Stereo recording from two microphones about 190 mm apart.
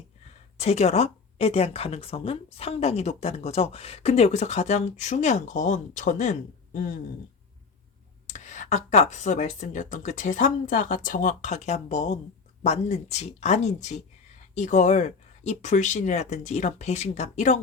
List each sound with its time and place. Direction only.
0.6 s speech: 35° left (ahead or behind)
8.3 s speech: 40° left (ahead or behind)